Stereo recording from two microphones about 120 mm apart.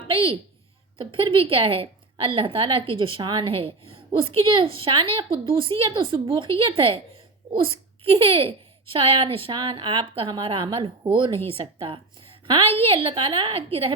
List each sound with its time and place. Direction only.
0.1 s a woman's voice: 50° right (ahead or behind)
11.4 s a woman's voice: 50° right (ahead or behind)